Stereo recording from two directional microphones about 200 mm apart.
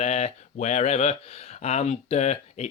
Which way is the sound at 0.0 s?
35° left (ahead or behind).